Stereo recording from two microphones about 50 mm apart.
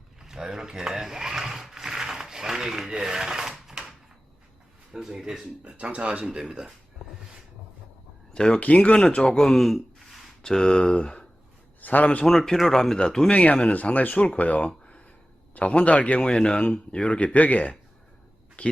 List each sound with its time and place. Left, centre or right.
0.2 s a sound: centre
4.9 s speech: centre
5.6 s speech: right
8.3 s speech: centre
10.4 s speech: centre
11.8 s a man's voice: left
12.2 s speech: centre
13.3 s speech: left